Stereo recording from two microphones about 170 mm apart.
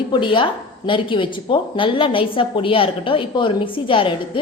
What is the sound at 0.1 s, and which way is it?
A woman's voice, 30° left (ahead or behind).